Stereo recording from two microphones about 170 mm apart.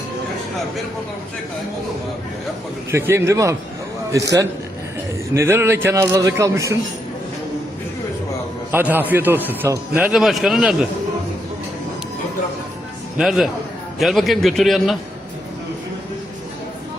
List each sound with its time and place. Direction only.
2.9 s a man's voice: 15° right (ahead or behind)
8.7 s a man's voice: 10° right (ahead or behind)
10.1 s a man's voice: centre (ahead or behind)
13.1 s a man's voice: centre (ahead or behind)